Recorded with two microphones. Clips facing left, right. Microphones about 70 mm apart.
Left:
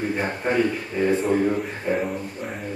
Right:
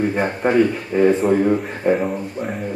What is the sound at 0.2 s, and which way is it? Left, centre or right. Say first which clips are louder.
A man's voice: right 6 dB; right.